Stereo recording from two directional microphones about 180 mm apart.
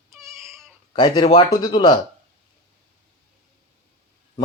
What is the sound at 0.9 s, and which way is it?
Speech, 25° left (ahead or behind).